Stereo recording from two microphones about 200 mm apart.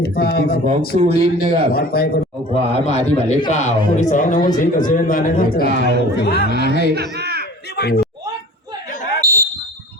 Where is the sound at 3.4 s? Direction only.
35° left (ahead or behind); by 6.9 s 55° left (ahead or behind).